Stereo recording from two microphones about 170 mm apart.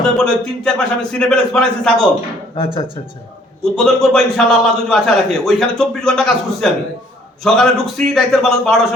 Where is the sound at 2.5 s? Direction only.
30° left (ahead or behind).